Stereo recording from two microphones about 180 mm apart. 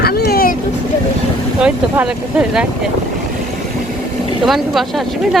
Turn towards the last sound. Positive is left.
turn(degrees=0)  # may be behind; listen again after turning